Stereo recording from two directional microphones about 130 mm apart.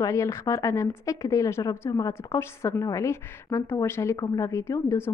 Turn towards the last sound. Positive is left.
turn(degrees=20)  # may be behind; listen again after turning